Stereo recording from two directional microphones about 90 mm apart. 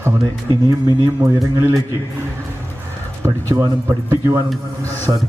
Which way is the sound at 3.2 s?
35° right (ahead or behind).